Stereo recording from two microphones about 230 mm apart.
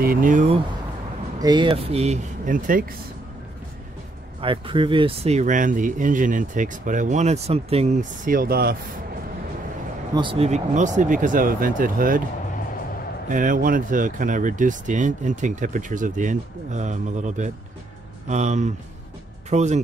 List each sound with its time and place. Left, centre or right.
0.0 s speech: right
1.4 s speech: centre; by 2.8 s right
4.4 s speech: right
10.1 s speech: right
13.3 s speech: right